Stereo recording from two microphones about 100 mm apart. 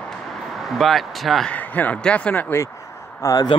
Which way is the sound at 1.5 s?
15° left (ahead or behind).